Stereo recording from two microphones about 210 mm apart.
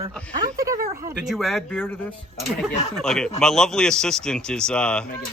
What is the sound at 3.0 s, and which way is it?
Speech, 5° left (ahead or behind).